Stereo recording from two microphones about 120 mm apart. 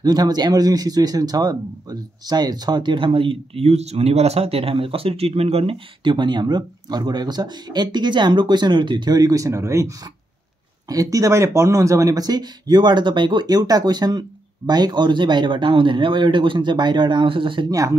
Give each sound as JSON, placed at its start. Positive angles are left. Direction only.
{"t": 0.0, "sound": "a man's voice", "side_deg": -35}
{"t": 17.6, "sound": "speech", "side_deg": -30}